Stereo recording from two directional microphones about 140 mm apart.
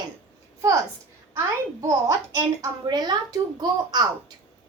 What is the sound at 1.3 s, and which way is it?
A woman's voice, 20° right (ahead or behind).